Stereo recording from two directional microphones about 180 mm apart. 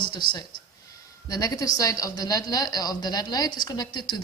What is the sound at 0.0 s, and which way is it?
A woman's voice, 25° left (ahead or behind).